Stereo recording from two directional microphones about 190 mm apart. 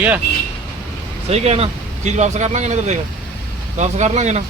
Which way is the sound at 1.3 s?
35° right (ahead or behind).